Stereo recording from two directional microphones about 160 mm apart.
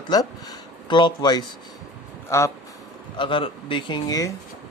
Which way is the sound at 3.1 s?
30° left (ahead or behind).